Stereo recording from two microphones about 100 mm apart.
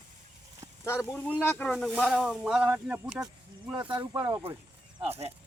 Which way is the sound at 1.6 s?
5° left (ahead or behind).